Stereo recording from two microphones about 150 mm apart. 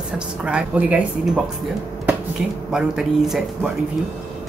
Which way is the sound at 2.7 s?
5° right (ahead or behind).